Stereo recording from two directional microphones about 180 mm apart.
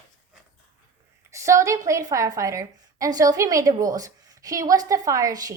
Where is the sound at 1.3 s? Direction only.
15° right (ahead or behind).